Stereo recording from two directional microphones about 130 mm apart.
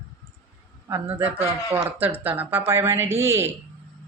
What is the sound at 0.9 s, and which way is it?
A man's voice, 20° right (ahead or behind).